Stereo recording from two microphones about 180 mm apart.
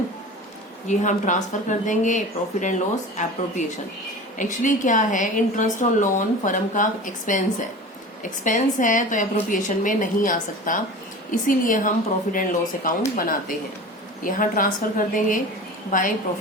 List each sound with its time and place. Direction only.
0.9 s a woman's voice: 45° left (ahead or behind)
8.4 s a woman's voice: 45° left (ahead or behind)